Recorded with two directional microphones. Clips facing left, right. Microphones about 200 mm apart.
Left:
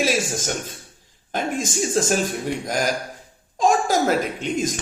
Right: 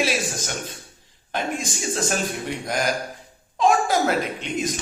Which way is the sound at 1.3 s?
45° left (ahead or behind).